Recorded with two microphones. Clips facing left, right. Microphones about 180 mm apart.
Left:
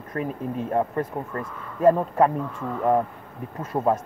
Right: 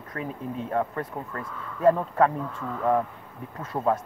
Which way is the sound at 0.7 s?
25° left (ahead or behind).